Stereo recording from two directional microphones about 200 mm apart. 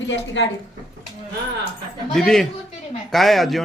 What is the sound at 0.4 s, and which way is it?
Speech, 65° left (ahead or behind).